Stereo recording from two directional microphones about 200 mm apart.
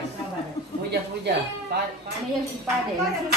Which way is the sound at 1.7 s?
55° right (ahead or behind).